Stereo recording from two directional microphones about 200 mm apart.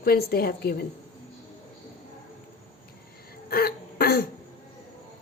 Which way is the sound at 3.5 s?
50° left (ahead or behind).